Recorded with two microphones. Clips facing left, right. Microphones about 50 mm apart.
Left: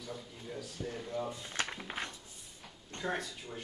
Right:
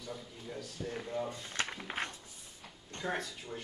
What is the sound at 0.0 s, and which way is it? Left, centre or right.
Speech, centre.